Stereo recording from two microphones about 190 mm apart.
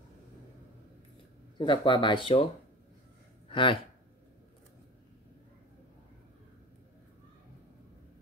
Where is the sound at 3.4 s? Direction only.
25° left (ahead or behind).